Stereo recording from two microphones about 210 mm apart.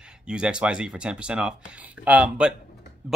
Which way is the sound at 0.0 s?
5° right (ahead or behind).